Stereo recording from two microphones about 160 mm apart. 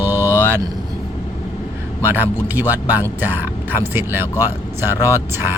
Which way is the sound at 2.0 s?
10° right (ahead or behind).